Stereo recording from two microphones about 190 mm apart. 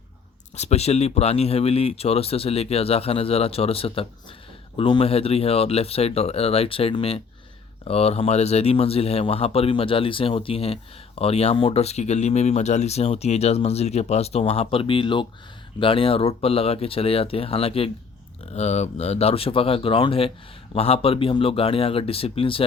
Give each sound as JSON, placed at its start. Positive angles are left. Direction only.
{"t": 0.5, "sound": "a man's voice", "side_deg": 35}